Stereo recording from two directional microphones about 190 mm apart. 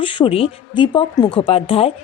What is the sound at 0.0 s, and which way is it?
Speech, 25° left (ahead or behind).